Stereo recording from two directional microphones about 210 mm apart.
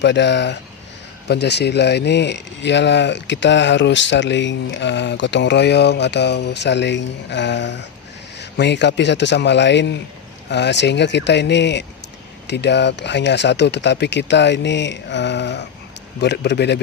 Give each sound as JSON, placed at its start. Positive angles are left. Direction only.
{"t": 0.0, "sound": "a man's voice", "side_deg": 55}